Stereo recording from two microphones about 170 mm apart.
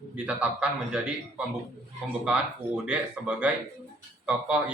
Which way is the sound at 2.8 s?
5° right (ahead or behind).